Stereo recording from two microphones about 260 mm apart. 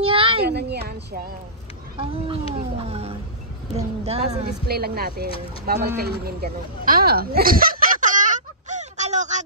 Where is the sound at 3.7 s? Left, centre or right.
Right.